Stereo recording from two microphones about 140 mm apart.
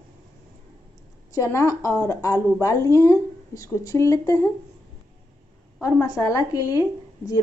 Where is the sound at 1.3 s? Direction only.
20° left (ahead or behind).